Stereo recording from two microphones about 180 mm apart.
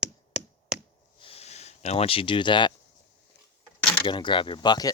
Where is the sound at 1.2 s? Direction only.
30° left (ahead or behind).